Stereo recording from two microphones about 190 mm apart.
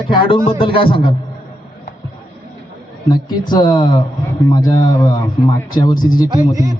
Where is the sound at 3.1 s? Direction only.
20° left (ahead or behind).